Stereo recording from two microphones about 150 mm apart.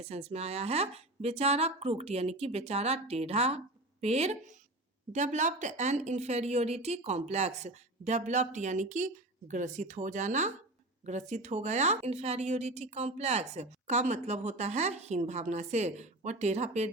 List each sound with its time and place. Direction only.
0.0 s a woman's voice: 45° right (ahead or behind)